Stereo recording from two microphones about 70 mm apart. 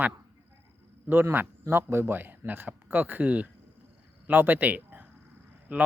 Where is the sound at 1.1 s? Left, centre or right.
Right.